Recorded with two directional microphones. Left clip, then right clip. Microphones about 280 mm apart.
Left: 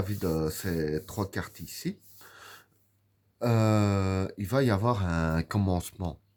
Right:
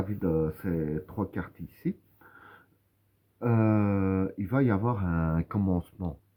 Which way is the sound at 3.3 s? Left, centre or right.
Left.